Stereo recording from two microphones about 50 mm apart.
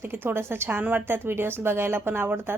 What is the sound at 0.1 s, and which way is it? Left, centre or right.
A woman's voice, right.